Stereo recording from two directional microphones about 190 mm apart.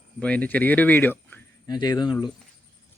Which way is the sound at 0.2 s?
5° left (ahead or behind).